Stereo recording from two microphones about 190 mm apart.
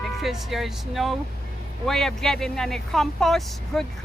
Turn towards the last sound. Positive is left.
turn(degrees=0)  # may be behind; listen again after turning